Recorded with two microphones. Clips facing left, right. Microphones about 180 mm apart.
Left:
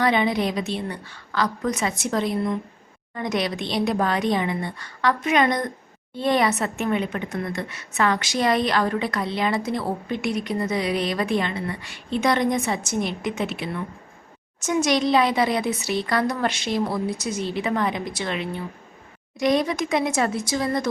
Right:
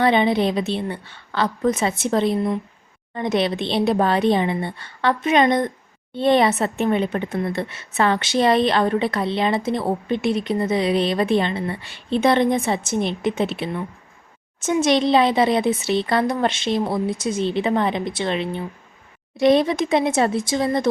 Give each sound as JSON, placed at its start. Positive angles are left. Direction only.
{"t": 0.0, "sound": "a woman's voice", "side_deg": -30}
{"t": 14.8, "sound": "a woman's voice", "side_deg": -25}